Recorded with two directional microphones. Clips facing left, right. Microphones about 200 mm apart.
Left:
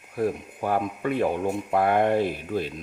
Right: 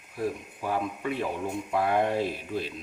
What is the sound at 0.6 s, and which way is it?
Speech, 55° left (ahead or behind).